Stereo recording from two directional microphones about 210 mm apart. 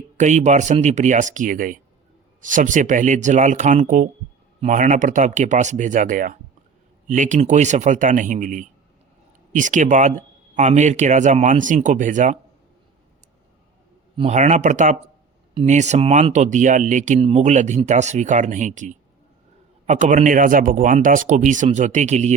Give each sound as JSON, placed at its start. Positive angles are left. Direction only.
{"t": 0.2, "sound": "speech", "side_deg": -35}
{"t": 14.2, "sound": "speech", "side_deg": -30}